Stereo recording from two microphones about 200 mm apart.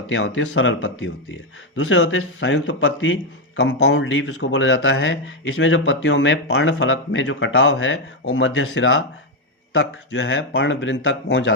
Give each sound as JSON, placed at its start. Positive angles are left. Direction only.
{"t": 0.1, "sound": "speech", "side_deg": 75}